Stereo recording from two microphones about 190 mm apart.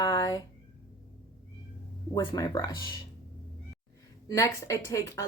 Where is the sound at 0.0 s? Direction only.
20° left (ahead or behind).